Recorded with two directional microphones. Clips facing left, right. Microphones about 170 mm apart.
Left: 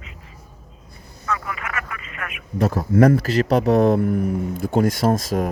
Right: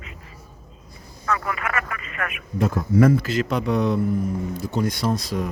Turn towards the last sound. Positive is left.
turn(degrees=45)  # may be behind; listen again after turning